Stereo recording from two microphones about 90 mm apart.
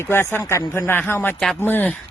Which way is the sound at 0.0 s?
25° left (ahead or behind).